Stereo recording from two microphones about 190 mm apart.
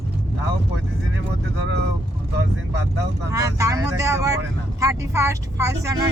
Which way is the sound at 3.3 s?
15° right (ahead or behind).